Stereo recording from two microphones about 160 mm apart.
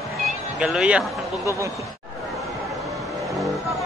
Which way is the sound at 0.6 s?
5° right (ahead or behind).